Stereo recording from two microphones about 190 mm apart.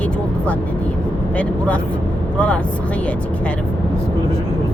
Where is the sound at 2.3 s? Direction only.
5° left (ahead or behind).